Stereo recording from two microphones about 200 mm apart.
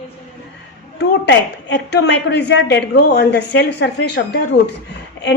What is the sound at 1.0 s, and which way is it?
A woman's voice, 60° left (ahead or behind).